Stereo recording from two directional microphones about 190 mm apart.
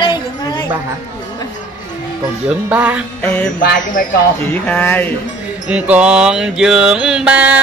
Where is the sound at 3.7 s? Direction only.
45° left (ahead or behind).